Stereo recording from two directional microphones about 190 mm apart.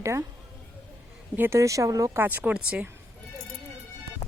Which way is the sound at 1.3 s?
10° right (ahead or behind).